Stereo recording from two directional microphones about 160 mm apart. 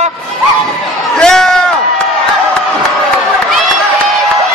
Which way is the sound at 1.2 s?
5° left (ahead or behind).